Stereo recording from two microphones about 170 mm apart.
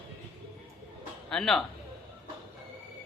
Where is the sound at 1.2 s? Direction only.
5° left (ahead or behind).